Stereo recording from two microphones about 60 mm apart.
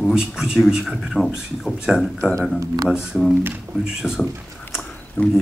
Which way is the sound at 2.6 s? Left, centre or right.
Right.